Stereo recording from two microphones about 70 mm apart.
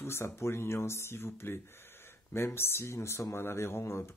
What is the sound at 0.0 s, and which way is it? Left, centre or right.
Speech, left.